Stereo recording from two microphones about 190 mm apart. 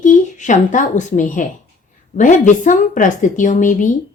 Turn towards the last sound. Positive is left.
turn(degrees=40)  # may be behind; listen again after turning